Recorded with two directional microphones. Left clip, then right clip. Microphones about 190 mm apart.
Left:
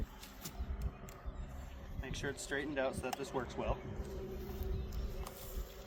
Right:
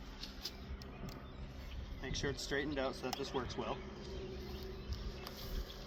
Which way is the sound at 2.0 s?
20° left (ahead or behind).